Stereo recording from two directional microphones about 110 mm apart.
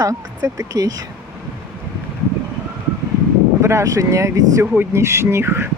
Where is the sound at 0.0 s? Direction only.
30° right (ahead or behind).